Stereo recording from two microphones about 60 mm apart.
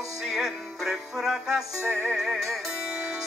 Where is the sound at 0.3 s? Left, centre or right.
Centre.